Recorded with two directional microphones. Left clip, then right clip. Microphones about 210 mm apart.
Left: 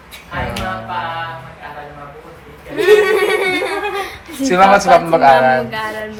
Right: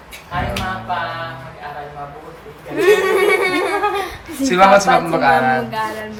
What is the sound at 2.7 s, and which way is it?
A man's voice, centre (ahead or behind).